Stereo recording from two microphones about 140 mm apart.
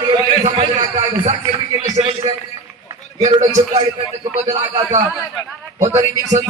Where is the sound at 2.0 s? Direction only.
40° right (ahead or behind).